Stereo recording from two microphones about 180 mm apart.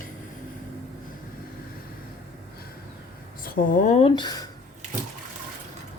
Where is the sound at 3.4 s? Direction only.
50° left (ahead or behind).